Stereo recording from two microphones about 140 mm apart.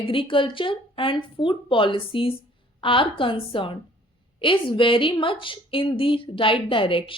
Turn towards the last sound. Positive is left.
turn(degrees=40)  # may be behind; listen again after turning